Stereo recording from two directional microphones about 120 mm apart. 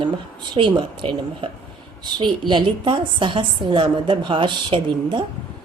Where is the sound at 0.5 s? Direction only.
45° right (ahead or behind).